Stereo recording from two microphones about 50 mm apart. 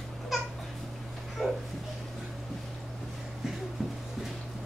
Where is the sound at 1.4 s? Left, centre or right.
Centre.